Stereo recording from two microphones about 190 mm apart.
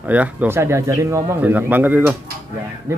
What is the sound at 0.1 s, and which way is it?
Speech, 10° right (ahead or behind).